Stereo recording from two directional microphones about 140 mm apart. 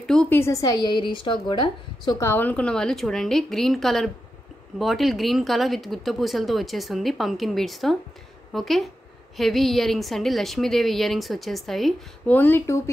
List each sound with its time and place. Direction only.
0.0 s a sound: 5° left (ahead or behind)
0.4 s a woman's voice: 25° left (ahead or behind)
2.2 s speech: 15° left (ahead or behind)
12.4 s speech: 15° left (ahead or behind)